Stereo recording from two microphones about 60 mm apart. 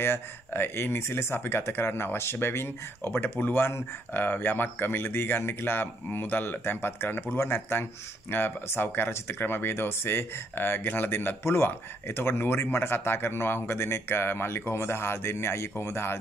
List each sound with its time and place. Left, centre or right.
0.0 s speech: left